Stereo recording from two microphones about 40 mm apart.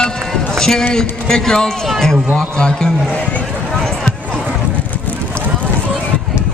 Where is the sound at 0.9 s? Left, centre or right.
Centre.